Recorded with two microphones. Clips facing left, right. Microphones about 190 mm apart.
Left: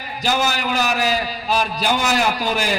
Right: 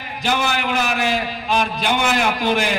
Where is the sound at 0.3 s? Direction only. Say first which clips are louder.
Even; 40° left (ahead or behind).